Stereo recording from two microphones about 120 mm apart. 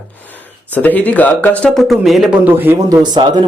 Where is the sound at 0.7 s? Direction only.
15° left (ahead or behind).